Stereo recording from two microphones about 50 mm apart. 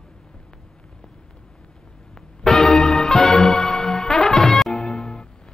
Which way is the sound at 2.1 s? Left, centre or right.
Centre.